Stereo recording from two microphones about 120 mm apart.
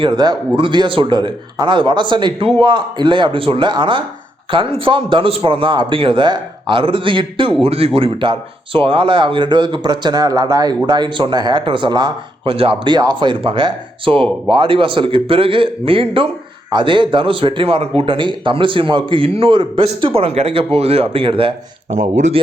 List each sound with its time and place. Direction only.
0.0 s a man's voice: 40° right (ahead or behind)
21.9 s speech: 75° right (ahead or behind)